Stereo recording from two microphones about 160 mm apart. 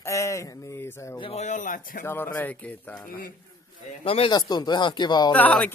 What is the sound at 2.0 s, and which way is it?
Speech, 15° left (ahead or behind).